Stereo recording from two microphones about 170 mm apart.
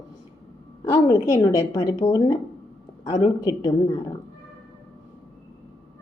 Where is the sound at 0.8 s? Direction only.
25° left (ahead or behind).